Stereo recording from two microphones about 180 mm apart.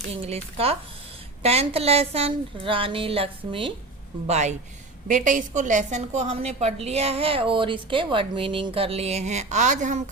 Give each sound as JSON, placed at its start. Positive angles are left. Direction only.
{"t": 0.2, "sound": "a woman's voice", "side_deg": -35}